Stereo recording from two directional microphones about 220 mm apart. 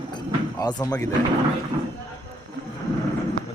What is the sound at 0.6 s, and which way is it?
Speech, 15° left (ahead or behind).